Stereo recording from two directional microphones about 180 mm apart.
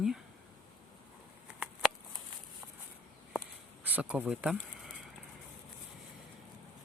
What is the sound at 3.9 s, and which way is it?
Speech, 10° right (ahead or behind).